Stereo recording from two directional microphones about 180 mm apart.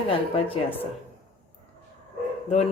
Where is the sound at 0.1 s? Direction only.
30° left (ahead or behind).